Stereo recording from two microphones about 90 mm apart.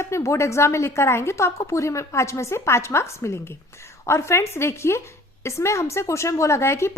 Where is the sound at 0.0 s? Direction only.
35° left (ahead or behind).